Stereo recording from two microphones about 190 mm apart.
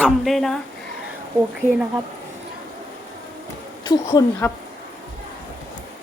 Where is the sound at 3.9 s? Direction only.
20° left (ahead or behind).